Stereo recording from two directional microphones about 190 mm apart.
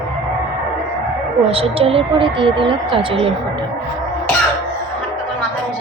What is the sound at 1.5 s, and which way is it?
Speech, 30° right (ahead or behind).